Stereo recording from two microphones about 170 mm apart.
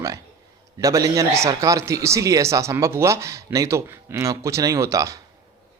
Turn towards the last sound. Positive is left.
turn(degrees=-20)  # may be behind; listen again after turning